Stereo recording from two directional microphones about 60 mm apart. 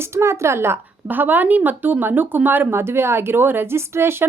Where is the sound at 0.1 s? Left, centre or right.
Right.